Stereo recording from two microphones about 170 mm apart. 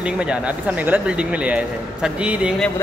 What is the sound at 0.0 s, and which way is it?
Speech, 5° right (ahead or behind).